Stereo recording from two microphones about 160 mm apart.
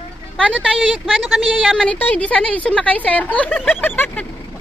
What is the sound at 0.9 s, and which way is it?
A woman's voice, centre (ahead or behind).